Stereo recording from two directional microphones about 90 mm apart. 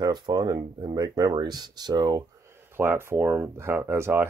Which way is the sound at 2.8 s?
30° right (ahead or behind).